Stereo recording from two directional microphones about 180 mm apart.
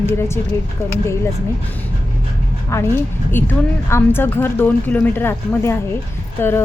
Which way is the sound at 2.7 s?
15° left (ahead or behind).